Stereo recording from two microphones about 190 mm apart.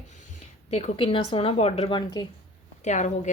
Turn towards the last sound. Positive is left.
turn(degrees=40)  # may be behind; listen again after turning